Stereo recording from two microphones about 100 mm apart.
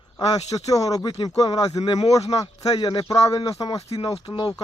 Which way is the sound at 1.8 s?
80° left.